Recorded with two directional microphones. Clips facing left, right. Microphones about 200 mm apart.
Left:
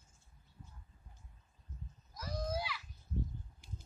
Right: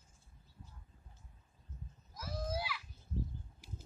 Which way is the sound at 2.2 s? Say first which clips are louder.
Left 1 dB; 5° right (ahead or behind).